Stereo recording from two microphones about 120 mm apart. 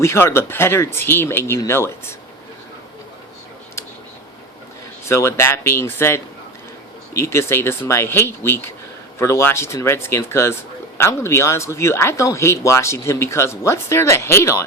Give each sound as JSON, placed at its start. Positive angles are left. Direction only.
{"t": 0.0, "sound": "speech", "side_deg": 20}
{"t": 5.0, "sound": "speech", "side_deg": 20}